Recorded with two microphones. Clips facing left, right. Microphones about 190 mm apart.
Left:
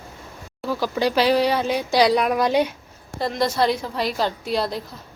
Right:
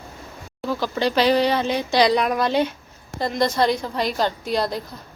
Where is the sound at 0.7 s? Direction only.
10° left (ahead or behind).